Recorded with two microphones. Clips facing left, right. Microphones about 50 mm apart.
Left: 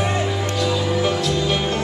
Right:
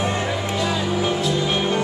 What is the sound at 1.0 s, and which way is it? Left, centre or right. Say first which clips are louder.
Music: left 1 dB; centre.